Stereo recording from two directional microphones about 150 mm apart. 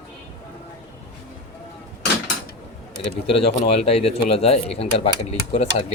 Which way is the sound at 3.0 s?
40° left (ahead or behind).